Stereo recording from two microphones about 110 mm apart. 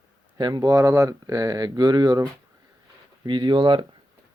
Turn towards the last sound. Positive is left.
turn(degrees=-50)  # may be behind; listen again after turning